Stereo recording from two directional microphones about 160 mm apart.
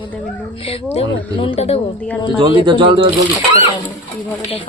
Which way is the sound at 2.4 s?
30° right (ahead or behind).